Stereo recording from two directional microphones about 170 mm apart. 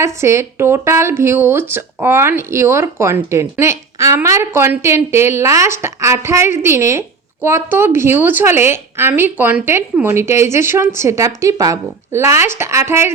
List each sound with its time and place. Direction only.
0.0 s speech: 15° right (ahead or behind)